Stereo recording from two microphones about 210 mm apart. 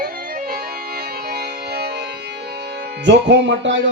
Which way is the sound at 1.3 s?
50° right (ahead or behind).